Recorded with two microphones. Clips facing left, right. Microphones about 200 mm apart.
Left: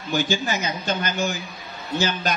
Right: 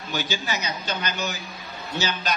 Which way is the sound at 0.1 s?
50° left (ahead or behind).